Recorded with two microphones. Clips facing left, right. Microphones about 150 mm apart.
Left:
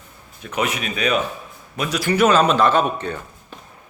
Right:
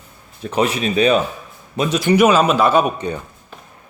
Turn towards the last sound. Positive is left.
turn(degrees=-15)  # may be behind; listen again after turning